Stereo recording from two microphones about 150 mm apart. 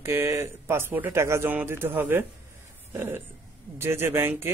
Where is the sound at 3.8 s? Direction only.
15° right (ahead or behind).